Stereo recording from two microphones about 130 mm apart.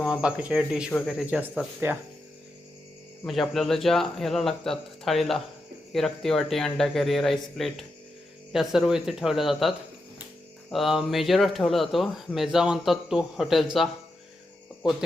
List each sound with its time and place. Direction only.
0.1 s speech: 10° right (ahead or behind)
0.9 s speech: 5° left (ahead or behind)
1.3 s speech: 10° right (ahead or behind)
3.2 s speech: centre (ahead or behind)